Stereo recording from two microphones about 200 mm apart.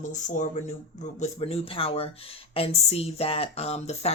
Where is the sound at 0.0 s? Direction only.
40° left (ahead or behind).